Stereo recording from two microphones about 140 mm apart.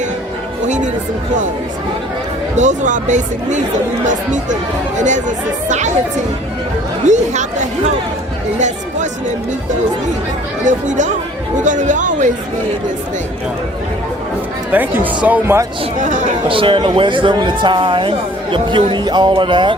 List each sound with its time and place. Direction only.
2.6 s speech: 60° right (ahead or behind)
7.1 s speech: 55° right (ahead or behind)
10.6 s speech: 60° right (ahead or behind)
14.7 s speech: 10° right (ahead or behind)
16.0 s speech: 65° right (ahead or behind)
16.5 s speech: 40° right (ahead or behind)